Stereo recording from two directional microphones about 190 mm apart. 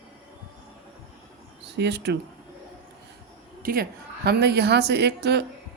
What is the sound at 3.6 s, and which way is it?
A woman's voice, 50° right (ahead or behind).